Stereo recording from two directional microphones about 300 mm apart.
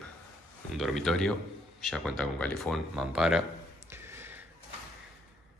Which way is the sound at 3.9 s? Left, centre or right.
Centre.